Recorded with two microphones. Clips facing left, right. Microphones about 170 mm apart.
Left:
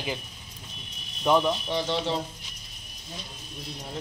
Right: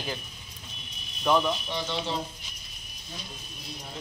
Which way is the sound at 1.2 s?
15° left (ahead or behind).